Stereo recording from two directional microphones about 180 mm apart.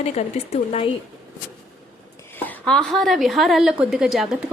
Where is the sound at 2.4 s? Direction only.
5° left (ahead or behind).